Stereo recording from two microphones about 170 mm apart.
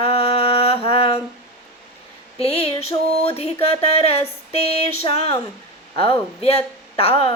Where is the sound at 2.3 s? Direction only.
35° left (ahead or behind).